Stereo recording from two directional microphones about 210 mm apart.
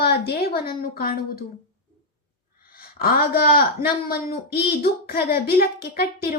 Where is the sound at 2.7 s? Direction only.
45° left (ahead or behind).